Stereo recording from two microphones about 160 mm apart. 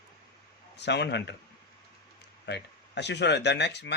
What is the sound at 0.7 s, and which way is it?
Speech, 90° left.